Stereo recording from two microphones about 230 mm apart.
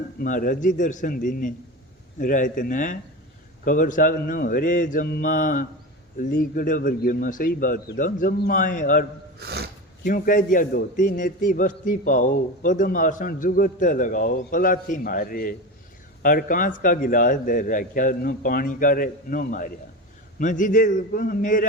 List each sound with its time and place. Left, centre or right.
0.2 s a man's voice: left
9.4 s speech: right
10.0 s a man's voice: left